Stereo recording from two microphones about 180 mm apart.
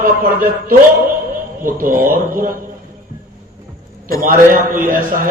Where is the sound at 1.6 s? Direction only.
50° right (ahead or behind).